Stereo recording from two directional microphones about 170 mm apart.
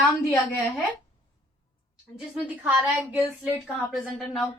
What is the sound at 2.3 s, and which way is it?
Speech, 10° right (ahead or behind).